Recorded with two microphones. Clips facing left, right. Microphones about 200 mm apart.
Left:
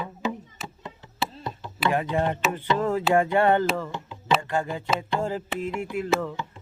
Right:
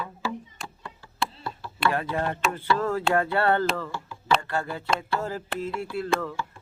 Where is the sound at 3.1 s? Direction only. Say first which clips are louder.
Left 4 dB; 15° left (ahead or behind).